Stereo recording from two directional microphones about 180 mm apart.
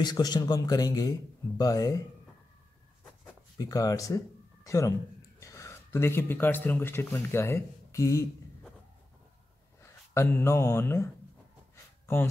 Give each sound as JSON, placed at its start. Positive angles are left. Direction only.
{"t": 0.0, "sound": "a man's voice", "side_deg": 25}
{"t": 3.5, "sound": "a man's voice", "side_deg": 20}
{"t": 9.8, "sound": "speech", "side_deg": 15}
{"t": 11.7, "sound": "a sound", "side_deg": 15}